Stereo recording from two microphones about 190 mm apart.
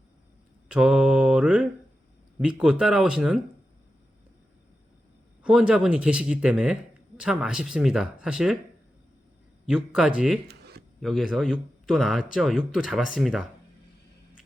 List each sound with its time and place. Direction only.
0.7 s mantra: 5° right (ahead or behind)
2.4 s speech: 5° right (ahead or behind)
5.4 s speech: 5° right (ahead or behind)
9.6 s speech: 5° right (ahead or behind)
10.5 s a sound: 60° right (ahead or behind)
11.0 s speech: centre (ahead or behind)